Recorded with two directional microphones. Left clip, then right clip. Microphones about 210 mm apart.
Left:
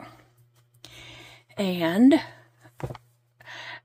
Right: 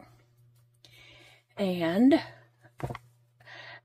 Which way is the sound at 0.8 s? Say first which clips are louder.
Left 8 dB; 25° left (ahead or behind).